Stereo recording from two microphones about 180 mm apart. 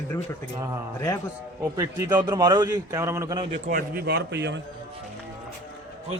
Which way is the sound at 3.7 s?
55° right (ahead or behind).